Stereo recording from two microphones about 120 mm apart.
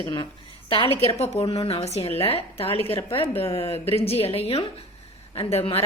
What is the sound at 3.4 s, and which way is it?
Speech, 20° left (ahead or behind).